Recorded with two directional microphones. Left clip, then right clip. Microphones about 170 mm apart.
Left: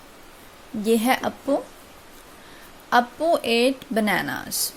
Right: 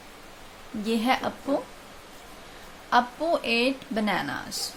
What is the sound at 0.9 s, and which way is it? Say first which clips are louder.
Speech: left 5 dB; 40° left (ahead or behind).